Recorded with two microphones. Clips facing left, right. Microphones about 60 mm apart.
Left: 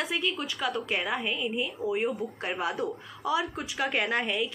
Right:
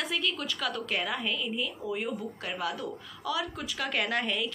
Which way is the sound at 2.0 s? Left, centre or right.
Left.